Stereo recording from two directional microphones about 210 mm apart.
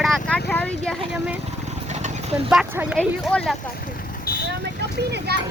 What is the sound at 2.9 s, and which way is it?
Speech, 5° left (ahead or behind).